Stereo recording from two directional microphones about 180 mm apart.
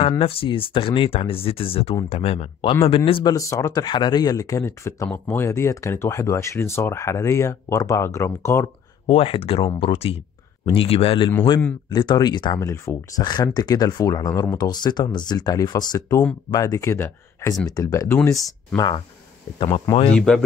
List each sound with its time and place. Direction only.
0.2 s speech: 30° left (ahead or behind); by 8.6 s 15° left (ahead or behind)
9.0 s speech: 30° left (ahead or behind)
20.2 s speech: 5° left (ahead or behind)